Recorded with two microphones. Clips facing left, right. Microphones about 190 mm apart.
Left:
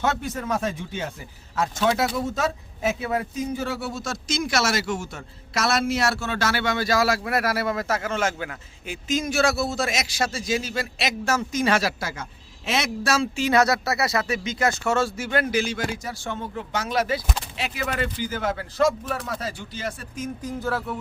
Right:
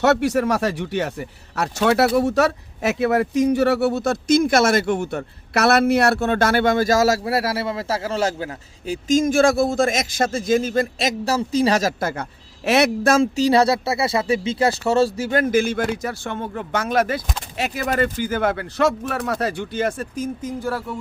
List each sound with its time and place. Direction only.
0.0 s speech: 75° right (ahead or behind); by 20.1 s 55° right (ahead or behind)
20.4 s speech: 15° right (ahead or behind)